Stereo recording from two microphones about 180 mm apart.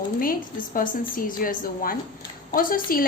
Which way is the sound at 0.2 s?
50° left (ahead or behind).